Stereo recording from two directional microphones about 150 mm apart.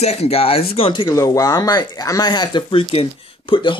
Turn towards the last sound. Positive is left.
turn(degrees=35)  # may be behind; listen again after turning